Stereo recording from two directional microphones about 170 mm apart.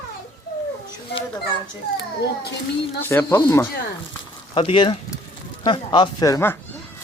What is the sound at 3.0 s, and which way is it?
Speech, 15° left (ahead or behind).